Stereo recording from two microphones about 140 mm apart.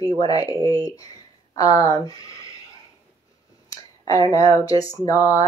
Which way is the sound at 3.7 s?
25° left (ahead or behind).